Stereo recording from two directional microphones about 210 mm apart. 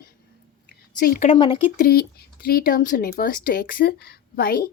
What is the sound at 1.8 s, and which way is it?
A woman's voice, 45° left (ahead or behind).